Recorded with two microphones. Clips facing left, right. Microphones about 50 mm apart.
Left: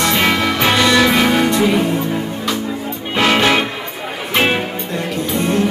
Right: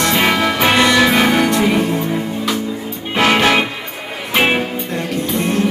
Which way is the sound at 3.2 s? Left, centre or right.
Centre.